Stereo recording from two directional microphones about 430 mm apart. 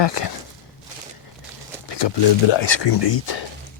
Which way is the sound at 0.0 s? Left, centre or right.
Left.